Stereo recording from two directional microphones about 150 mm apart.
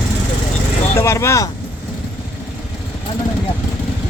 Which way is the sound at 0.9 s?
20° left (ahead or behind).